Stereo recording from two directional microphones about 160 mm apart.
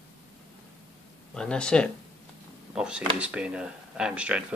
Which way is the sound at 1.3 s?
5° left (ahead or behind).